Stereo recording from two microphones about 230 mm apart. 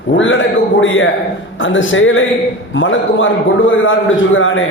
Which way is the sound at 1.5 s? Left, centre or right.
Left.